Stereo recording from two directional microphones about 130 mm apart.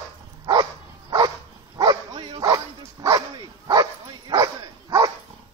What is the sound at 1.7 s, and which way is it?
Dog, 35° right (ahead or behind).